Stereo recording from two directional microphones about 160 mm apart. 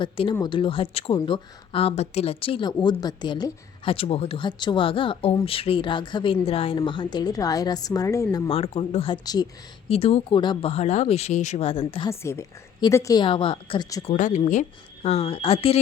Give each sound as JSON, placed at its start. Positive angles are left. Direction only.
{"t": 0.0, "sound": "a woman's voice", "side_deg": 30}
{"t": 8.4, "sound": "speech", "side_deg": 40}
{"t": 9.9, "sound": "speech", "side_deg": 40}
{"t": 10.3, "sound": "speech", "side_deg": 30}
{"t": 12.0, "sound": "a woman's voice", "side_deg": 20}
{"t": 13.2, "sound": "speech", "side_deg": 30}
{"t": 14.1, "sound": "speech", "side_deg": 50}